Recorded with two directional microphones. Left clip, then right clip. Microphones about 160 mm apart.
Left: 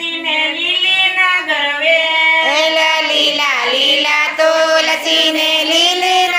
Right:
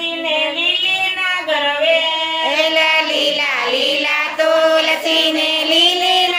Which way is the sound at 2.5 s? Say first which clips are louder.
Left 2 dB; 10° left (ahead or behind).